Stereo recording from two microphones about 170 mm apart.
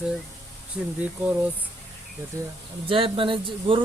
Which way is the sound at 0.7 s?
5° right (ahead or behind).